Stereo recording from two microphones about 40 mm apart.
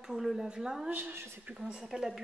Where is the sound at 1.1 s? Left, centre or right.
Right.